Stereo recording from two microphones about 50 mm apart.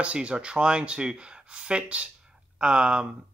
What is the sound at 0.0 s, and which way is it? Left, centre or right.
Speech, right.